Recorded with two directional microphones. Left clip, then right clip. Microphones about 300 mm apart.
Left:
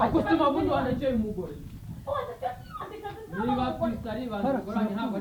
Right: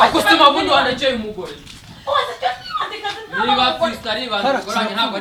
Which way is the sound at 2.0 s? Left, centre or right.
Centre.